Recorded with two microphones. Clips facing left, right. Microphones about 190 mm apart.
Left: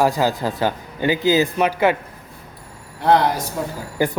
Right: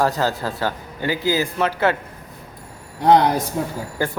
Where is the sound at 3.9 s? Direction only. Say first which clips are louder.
Left 4 dB; 15° left (ahead or behind).